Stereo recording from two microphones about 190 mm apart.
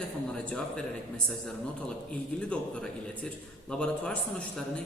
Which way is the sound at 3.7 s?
5° left (ahead or behind).